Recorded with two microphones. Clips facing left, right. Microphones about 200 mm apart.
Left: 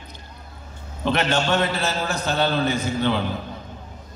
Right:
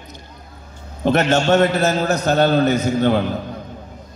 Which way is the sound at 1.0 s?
45° right (ahead or behind).